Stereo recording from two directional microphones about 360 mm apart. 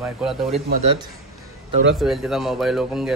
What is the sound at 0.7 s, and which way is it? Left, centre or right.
Speech, centre.